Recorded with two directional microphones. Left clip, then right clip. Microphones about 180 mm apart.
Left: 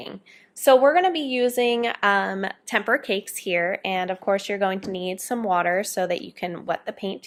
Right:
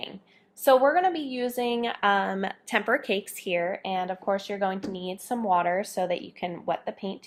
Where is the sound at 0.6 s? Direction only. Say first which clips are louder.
Left 4 dB; 35° left (ahead or behind).